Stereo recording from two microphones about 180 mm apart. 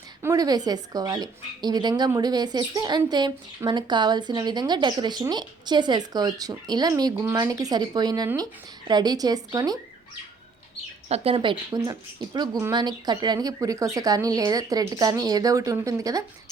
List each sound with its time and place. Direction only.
0.2 s speech: 20° right (ahead or behind)
11.1 s speech: 35° right (ahead or behind)